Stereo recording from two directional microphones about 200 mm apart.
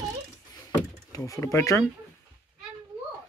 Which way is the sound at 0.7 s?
15° left (ahead or behind).